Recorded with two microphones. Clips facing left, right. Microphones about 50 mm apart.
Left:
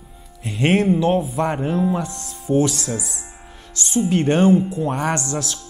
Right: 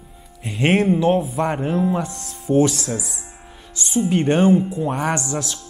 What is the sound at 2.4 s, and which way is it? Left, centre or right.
Speech, right.